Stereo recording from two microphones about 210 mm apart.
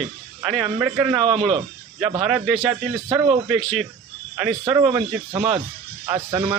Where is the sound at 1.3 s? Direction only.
25° right (ahead or behind).